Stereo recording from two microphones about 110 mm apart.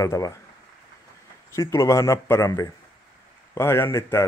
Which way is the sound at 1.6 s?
25° left (ahead or behind).